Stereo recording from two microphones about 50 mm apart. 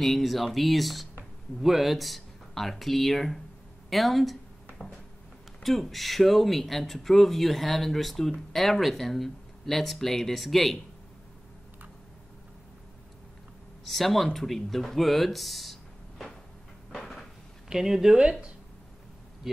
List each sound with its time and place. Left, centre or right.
0.0 s speech: centre
5.6 s speech: centre
13.8 s speech: centre
16.9 s cupboard open or close: centre
17.6 s speech: centre
19.4 s speech: centre